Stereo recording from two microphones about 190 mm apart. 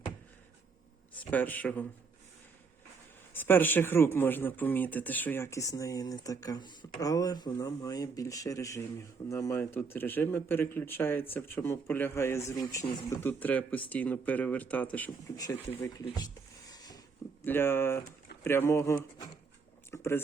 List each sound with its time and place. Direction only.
1.3 s speech: 10° left (ahead or behind)
3.3 s speech: 10° left (ahead or behind)
16.0 s a sound: 20° left (ahead or behind)
17.4 s speech: 10° left (ahead or behind)